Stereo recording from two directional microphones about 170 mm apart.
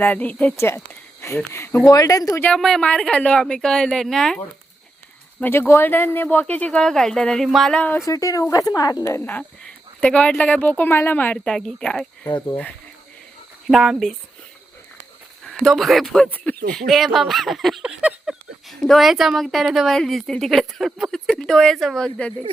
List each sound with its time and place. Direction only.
0.0 s speech: 10° left (ahead or behind)
2.5 s speech: centre (ahead or behind)
5.4 s speech: 15° left (ahead or behind)
8.0 s speech: 20° left (ahead or behind)
13.7 s speech: centre (ahead or behind)
15.4 s speech: centre (ahead or behind)